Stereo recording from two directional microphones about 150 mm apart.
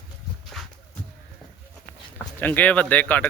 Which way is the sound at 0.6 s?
Centre (ahead or behind).